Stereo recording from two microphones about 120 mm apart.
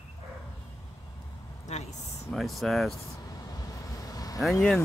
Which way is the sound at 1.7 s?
70° left (ahead or behind).